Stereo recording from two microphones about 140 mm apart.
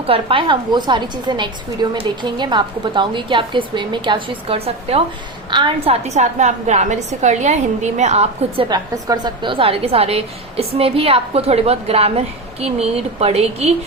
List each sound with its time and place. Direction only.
0.1 s a woman's voice: 40° right (ahead or behind)
8.7 s a woman's voice: 30° right (ahead or behind); by 13.7 s 50° right (ahead or behind)